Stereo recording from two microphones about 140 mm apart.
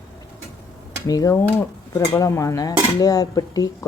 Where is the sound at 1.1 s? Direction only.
25° left (ahead or behind).